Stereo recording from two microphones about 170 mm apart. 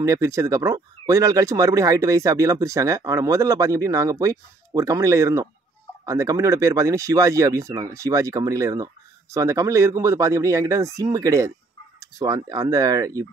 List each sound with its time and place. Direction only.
0.0 s speech: 20° right (ahead or behind)